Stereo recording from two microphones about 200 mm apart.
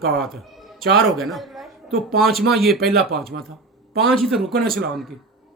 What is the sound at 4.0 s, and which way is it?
A child's voice, centre (ahead or behind).